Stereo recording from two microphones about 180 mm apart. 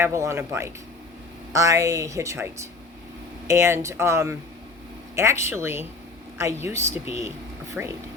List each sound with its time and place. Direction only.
0.0 s speech: 15° right (ahead or behind)